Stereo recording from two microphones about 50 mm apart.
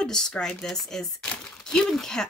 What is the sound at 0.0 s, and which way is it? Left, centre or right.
Speech, centre.